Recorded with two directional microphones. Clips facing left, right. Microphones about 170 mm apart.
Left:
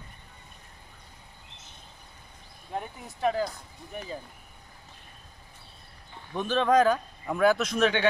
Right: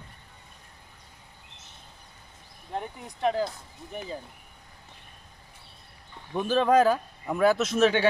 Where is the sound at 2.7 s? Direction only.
5° left (ahead or behind).